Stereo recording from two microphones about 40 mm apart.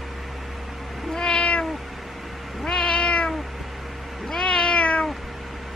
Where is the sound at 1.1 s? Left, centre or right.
Left.